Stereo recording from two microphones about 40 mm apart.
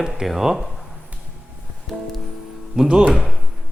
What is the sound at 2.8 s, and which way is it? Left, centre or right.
Speech, centre.